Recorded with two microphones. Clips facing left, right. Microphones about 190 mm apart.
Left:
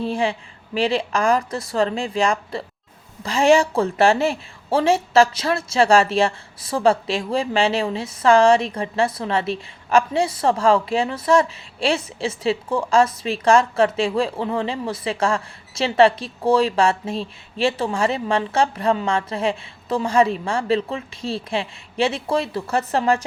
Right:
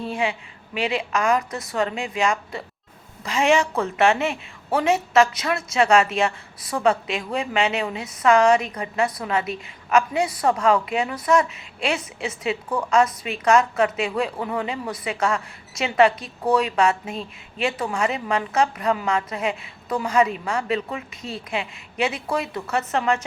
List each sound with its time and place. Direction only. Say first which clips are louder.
0.0 s a woman's voice: left 3 dB; 35° left (ahead or behind)